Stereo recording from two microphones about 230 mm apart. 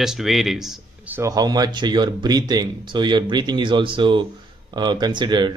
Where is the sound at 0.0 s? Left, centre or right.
Centre.